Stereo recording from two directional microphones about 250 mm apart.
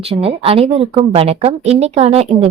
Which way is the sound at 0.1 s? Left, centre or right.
Right.